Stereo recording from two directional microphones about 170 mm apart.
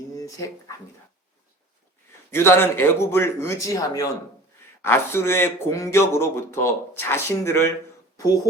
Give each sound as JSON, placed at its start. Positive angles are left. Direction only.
{"t": 0.2, "sound": "speech", "side_deg": 20}
{"t": 2.3, "sound": "speech", "side_deg": 15}